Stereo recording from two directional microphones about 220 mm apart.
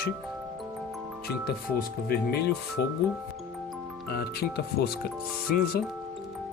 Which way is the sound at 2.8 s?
45° left (ahead or behind).